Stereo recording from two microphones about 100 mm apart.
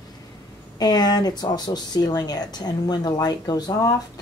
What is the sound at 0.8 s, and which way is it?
Speech, 45° left (ahead or behind).